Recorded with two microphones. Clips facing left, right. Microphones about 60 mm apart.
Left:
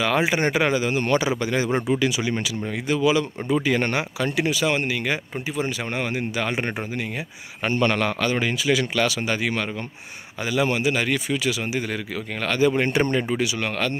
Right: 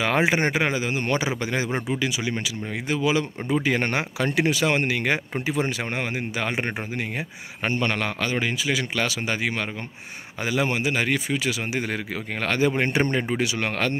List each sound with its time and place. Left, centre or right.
0.0 s speech: right
1.9 s a man's voice: centre
3.0 s speech: right
4.2 s speech: right
5.9 s speech: right
7.6 s a man's voice: centre
8.9 s speech: right
13.4 s speech: right